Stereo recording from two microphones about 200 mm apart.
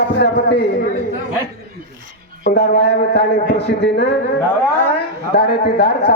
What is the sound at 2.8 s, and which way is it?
A man's voice, 55° left (ahead or behind).